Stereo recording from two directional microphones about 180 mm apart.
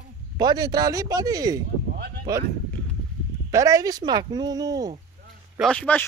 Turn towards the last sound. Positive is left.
turn(degrees=10)  # may be behind; listen again after turning